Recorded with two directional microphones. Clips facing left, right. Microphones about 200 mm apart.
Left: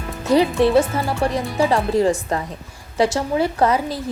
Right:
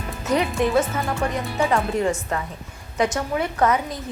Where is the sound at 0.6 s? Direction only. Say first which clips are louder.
Left 5 dB; 30° left (ahead or behind).